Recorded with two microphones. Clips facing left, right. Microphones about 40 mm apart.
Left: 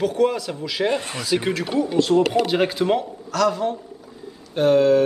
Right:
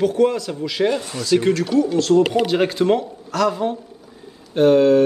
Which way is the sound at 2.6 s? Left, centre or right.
Centre.